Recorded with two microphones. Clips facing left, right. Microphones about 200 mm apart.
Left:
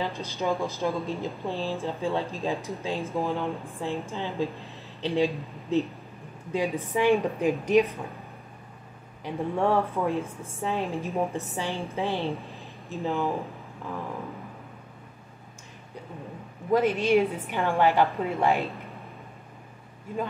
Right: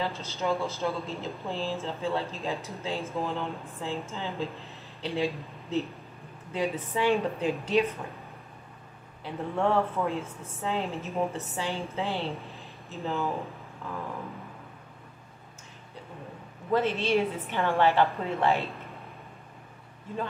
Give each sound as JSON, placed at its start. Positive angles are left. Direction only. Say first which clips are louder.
{"t": 0.0, "sound": "speech", "louder": "left 2 dB", "side_deg": 15}
{"t": 9.2, "sound": "speech", "louder": "left 2 dB", "side_deg": 15}
{"t": 16.7, "sound": "speech", "louder": "left 4 dB", "side_deg": 15}